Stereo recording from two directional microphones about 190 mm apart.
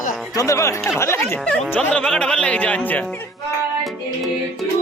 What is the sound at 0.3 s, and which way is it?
Speech, 15° left (ahead or behind).